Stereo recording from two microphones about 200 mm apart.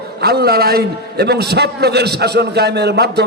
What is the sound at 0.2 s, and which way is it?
A man's voice, 50° right (ahead or behind).